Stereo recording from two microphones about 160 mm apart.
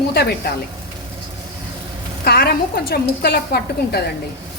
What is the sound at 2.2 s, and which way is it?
A woman's voice, 75° left (ahead or behind).